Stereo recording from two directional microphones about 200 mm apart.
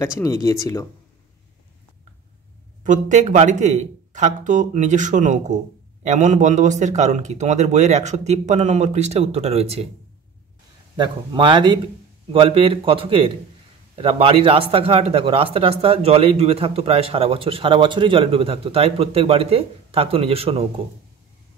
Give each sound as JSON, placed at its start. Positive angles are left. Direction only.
{"t": 0.2, "sound": "speech", "side_deg": 15}
{"t": 2.8, "sound": "speech", "side_deg": -40}
{"t": 11.0, "sound": "speech", "side_deg": -25}